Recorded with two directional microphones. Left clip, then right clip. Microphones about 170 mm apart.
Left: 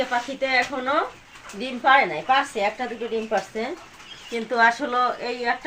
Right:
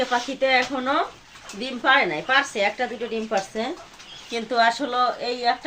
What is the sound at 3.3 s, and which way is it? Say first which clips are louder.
Speech: even; 65° right (ahead or behind).